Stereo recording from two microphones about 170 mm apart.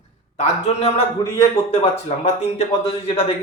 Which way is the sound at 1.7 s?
35° left (ahead or behind).